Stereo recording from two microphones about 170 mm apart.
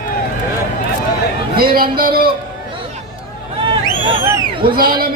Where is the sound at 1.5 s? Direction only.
60° right (ahead or behind).